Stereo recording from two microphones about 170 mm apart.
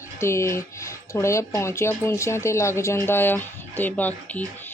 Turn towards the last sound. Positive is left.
turn(degrees=10)  # may be behind; listen again after turning